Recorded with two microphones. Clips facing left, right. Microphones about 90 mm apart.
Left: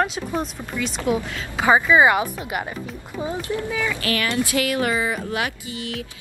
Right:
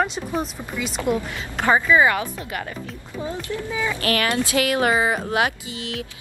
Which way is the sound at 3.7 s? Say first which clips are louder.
Right 3 dB; 20° right (ahead or behind).